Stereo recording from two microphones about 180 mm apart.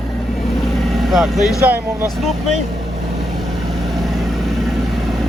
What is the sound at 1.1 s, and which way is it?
Speech, centre (ahead or behind).